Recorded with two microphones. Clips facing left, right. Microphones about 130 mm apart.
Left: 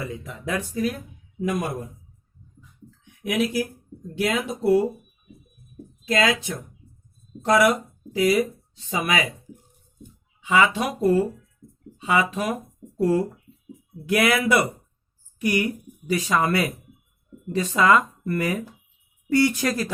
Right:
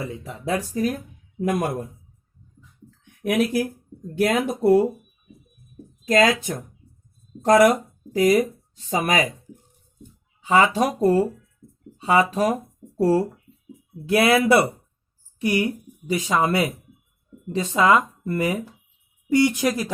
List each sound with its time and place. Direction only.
0.0 s speech: 30° right (ahead or behind)
0.7 s speech: 45° right (ahead or behind)
1.4 s speech: 55° right (ahead or behind)
3.0 s a sound: 55° right (ahead or behind)
4.1 s speech: 50° right (ahead or behind)
6.1 s speech: 45° right (ahead or behind)
10.4 s a woman's voice: 35° right (ahead or behind); by 19.9 s 15° right (ahead or behind)